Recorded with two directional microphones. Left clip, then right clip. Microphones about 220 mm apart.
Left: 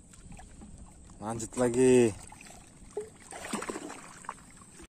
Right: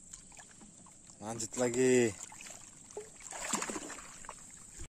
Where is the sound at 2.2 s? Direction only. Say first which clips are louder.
Right 1 dB; 10° right (ahead or behind).